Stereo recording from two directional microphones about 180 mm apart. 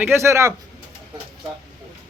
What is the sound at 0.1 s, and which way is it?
Speech, 15° right (ahead or behind).